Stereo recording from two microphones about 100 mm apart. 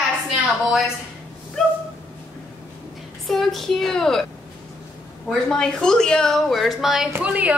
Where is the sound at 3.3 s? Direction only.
Centre (ahead or behind).